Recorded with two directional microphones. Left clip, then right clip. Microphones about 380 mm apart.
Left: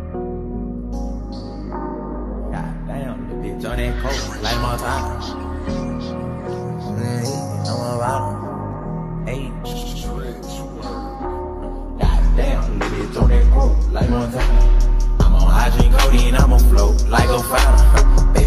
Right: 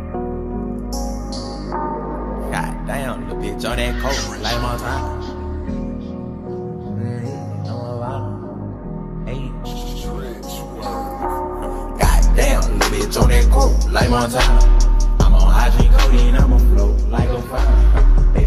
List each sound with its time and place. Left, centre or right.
3.6 s speech: centre
7.7 s music: left
12.0 s music: right
13.9 s music: right
15.1 s music: centre
17.1 s music: left